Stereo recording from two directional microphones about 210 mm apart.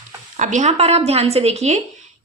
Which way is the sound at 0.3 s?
35° right (ahead or behind).